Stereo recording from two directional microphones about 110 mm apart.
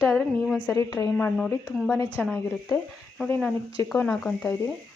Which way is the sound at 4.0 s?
15° left (ahead or behind).